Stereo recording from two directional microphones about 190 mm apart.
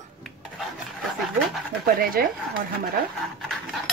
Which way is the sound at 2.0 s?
50° right (ahead or behind).